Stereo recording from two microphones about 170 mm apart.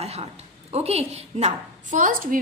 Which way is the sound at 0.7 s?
35° right (ahead or behind).